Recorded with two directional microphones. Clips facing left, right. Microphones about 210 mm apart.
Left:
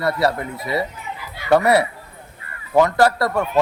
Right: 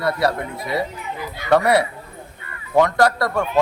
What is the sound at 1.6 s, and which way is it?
Music, 25° left (ahead or behind).